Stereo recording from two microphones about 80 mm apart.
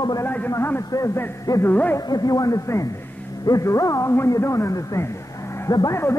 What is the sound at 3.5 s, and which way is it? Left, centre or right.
Speech, left.